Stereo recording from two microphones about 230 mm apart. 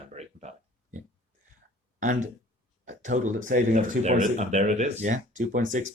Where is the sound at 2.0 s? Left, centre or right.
Right.